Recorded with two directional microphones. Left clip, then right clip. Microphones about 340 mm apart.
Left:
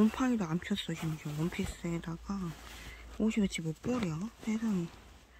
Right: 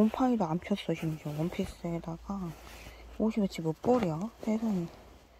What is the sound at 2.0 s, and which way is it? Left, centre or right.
Speech, centre.